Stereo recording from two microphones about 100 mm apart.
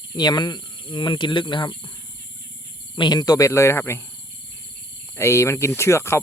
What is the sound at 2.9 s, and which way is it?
Speech, 45° left (ahead or behind).